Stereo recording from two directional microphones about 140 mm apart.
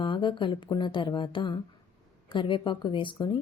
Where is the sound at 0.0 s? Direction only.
35° left (ahead or behind).